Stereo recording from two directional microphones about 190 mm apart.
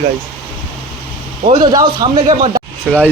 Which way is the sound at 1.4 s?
25° right (ahead or behind).